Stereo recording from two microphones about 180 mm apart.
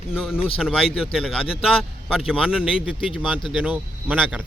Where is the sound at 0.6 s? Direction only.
5° right (ahead or behind).